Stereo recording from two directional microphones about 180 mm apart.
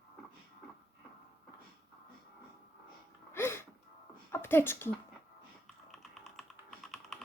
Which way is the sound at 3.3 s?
15° left (ahead or behind).